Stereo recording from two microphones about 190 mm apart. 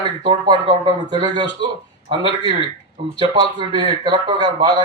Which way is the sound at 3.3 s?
25° right (ahead or behind).